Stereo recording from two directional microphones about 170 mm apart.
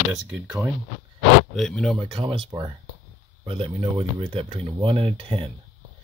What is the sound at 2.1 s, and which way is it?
Speech, 30° right (ahead or behind).